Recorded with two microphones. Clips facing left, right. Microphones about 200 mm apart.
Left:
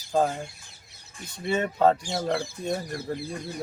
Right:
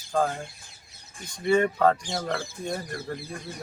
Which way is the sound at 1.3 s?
5° left (ahead or behind).